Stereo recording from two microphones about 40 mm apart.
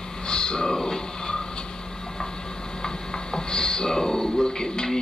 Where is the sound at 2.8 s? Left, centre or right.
Centre.